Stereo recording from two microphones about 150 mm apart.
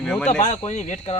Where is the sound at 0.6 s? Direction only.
50° left (ahead or behind).